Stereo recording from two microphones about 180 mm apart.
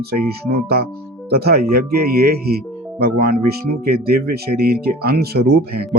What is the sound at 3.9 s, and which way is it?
Speech, 60° right (ahead or behind).